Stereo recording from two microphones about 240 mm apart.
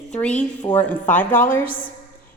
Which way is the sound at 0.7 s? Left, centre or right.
Centre.